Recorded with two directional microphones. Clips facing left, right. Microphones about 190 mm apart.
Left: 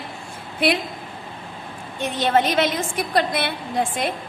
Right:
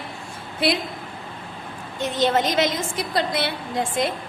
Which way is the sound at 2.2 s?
55° left (ahead or behind).